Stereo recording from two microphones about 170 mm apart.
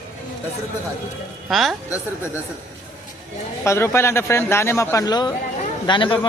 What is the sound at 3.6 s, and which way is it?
A man's voice, 15° left (ahead or behind).